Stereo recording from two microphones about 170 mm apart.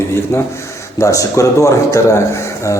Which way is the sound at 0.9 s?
20° left (ahead or behind).